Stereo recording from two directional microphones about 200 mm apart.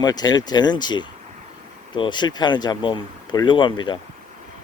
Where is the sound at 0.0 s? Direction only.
20° left (ahead or behind).